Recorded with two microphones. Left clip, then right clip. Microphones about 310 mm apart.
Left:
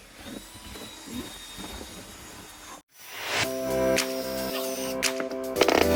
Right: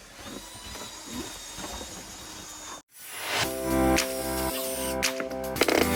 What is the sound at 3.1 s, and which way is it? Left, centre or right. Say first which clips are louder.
Music: left 1 dB; centre.